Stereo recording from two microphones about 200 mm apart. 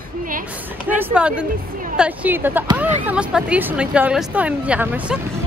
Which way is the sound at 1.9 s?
10° right (ahead or behind).